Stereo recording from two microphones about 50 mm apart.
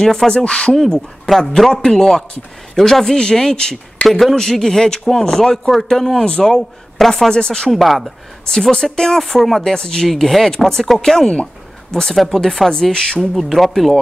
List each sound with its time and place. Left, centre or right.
0.0 s speech: centre
0.4 s speech: left
0.7 s speech: centre
7.7 s speech: centre
8.5 s speech: centre
13.2 s speech: centre